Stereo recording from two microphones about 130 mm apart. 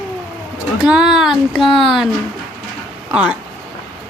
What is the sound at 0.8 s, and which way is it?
Speech, 5° right (ahead or behind).